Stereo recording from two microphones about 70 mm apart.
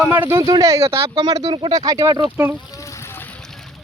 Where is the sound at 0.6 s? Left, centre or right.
Right.